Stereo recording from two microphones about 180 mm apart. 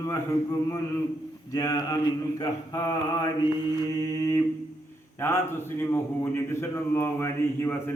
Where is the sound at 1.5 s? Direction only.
20° left (ahead or behind).